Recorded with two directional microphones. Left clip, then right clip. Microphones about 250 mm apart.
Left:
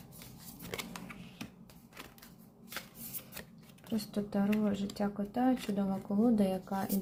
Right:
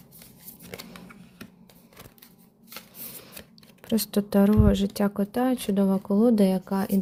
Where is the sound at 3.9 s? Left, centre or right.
Right.